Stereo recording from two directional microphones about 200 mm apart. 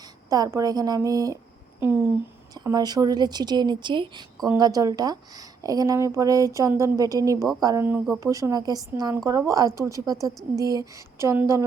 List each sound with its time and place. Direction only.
0.3 s a woman's voice: 15° right (ahead or behind)
2.6 s a woman's voice: 20° right (ahead or behind)
8.2 s a woman's voice: 15° right (ahead or behind)